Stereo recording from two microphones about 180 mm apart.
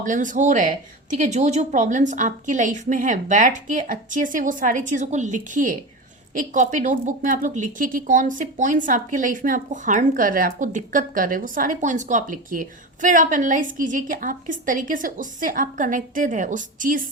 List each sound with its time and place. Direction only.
0.0 s a woman's voice: 45° right (ahead or behind)